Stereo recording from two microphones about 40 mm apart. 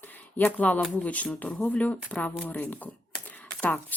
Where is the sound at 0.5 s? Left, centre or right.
Left.